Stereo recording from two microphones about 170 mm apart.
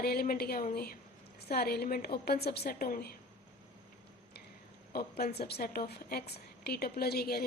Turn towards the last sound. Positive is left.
turn(degrees=65)  # may be behind; listen again after turning